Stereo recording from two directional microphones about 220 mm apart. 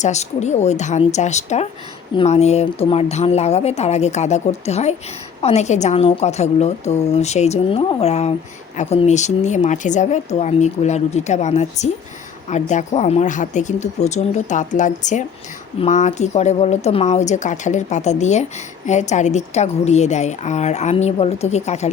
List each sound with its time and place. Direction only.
0.0 s a woman's voice: 30° left (ahead or behind)